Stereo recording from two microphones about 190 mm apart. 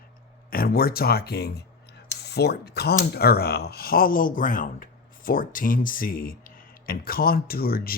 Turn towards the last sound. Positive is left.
turn(degrees=50)  # may be behind; listen again after turning